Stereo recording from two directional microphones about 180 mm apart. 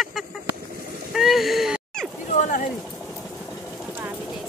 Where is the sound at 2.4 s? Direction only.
45° left (ahead or behind).